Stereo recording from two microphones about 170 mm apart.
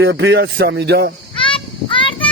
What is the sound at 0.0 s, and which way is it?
Speech, 85° right.